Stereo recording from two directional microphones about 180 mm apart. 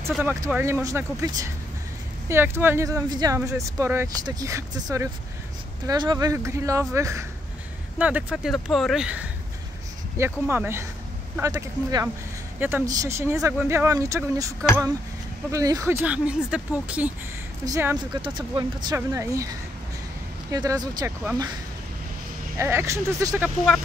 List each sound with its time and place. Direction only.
0.2 s speech: 10° right (ahead or behind)
16.0 s speech: 5° right (ahead or behind)
20.5 s speech: 20° right (ahead or behind)
22.6 s speech: 15° right (ahead or behind)